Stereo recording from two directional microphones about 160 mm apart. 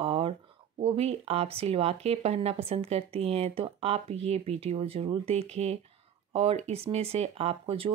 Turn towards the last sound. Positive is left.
turn(degrees=-35)  # may be behind; listen again after turning